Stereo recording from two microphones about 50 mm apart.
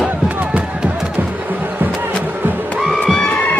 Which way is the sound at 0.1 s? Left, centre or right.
Right.